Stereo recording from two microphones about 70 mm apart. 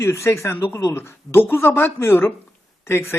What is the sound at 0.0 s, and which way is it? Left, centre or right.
Speech, left.